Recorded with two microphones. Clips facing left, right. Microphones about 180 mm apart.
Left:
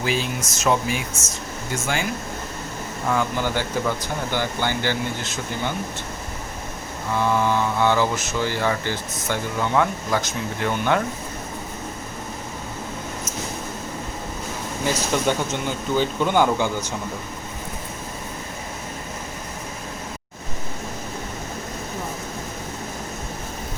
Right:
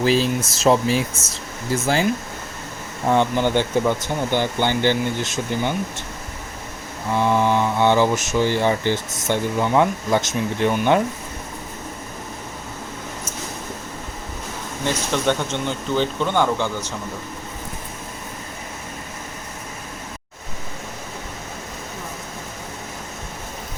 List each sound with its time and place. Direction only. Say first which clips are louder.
0.0 s speech: right 6 dB; 35° right (ahead or behind)
3.1 s speech: right 5 dB; 25° right (ahead or behind)
7.2 s speech: right 2 dB; 20° right (ahead or behind)
15.1 s speech: right 2 dB; 10° left (ahead or behind)